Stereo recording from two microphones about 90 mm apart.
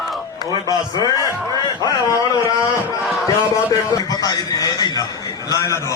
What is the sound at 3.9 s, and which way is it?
A man's voice, 40° left (ahead or behind).